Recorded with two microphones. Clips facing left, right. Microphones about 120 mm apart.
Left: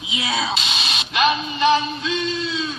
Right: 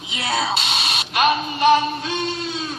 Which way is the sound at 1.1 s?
45° right (ahead or behind).